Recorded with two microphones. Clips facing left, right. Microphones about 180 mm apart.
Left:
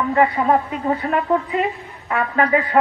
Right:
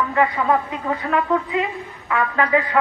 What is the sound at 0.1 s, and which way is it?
A woman's voice, 35° left (ahead or behind).